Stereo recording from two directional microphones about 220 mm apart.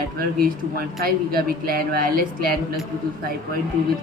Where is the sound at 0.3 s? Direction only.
40° right (ahead or behind).